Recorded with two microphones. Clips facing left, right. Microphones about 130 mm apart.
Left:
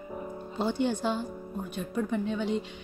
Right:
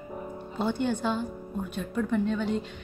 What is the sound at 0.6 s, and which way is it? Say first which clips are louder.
Speech: even; 55° right (ahead or behind).